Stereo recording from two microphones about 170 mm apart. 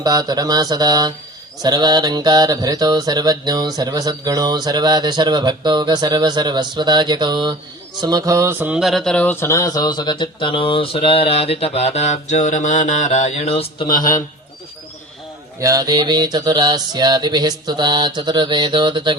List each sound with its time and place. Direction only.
0.0 s mantra: 25° right (ahead or behind)
8.0 s speech: 20° right (ahead or behind); by 13.8 s 35° left (ahead or behind)
15.6 s mantra: 20° right (ahead or behind)